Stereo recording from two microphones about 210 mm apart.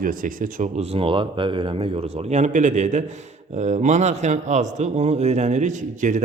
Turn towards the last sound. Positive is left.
turn(degrees=-35)  # may be behind; listen again after turning